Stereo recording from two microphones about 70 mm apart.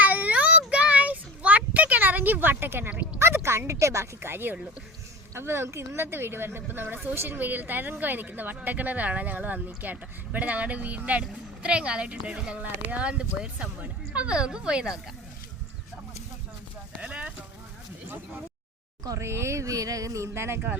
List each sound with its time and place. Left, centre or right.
0.0 s child singing: right
3.2 s a woman's voice: right; by 14.9 s centre
17.0 s clip-clop: centre
19.0 s speech: right